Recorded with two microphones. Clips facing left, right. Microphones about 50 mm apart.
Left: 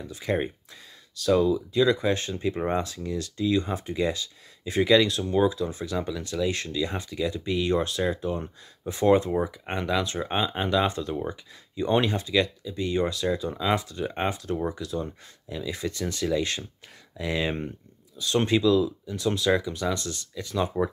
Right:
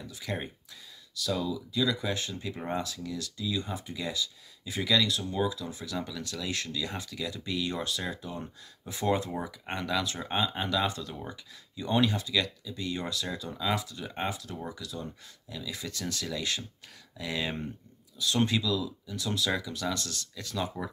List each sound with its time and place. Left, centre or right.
0.0 s speech: left
5.9 s speech: left
9.3 s speech: left